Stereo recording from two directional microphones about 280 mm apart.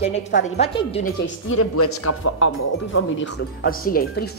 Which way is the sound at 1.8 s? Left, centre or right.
Left.